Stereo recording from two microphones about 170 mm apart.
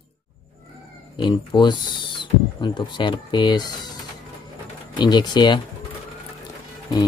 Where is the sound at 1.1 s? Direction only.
25° left (ahead or behind).